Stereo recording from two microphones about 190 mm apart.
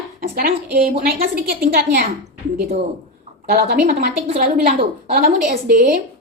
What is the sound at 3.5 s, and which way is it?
A woman's voice, 55° right (ahead or behind).